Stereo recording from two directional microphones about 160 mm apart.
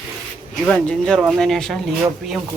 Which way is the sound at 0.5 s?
5° left (ahead or behind).